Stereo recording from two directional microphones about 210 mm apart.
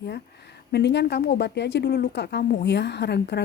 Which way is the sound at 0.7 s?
55° left (ahead or behind).